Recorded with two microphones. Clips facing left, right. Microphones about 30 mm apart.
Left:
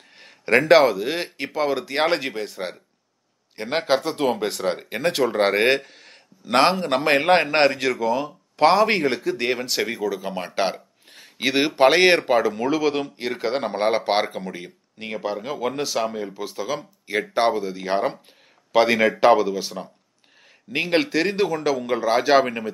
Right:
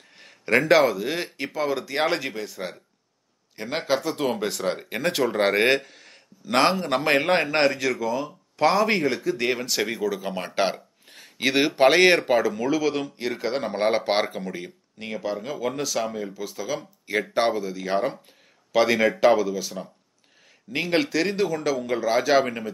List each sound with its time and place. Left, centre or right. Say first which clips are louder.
0.2 s speech: left 3 dB; centre
9.4 s speech: left 1 dB; centre
15.0 s speech: left 2 dB; left
16.7 s speech: even; centre
17.6 s speech: left 2 dB; left